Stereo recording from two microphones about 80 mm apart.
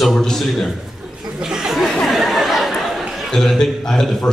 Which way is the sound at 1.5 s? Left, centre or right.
Centre.